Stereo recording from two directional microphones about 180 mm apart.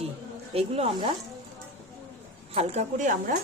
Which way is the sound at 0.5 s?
30° right (ahead or behind).